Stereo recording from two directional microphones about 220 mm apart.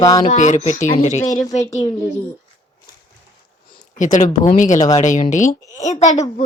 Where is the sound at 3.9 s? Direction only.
35° left (ahead or behind).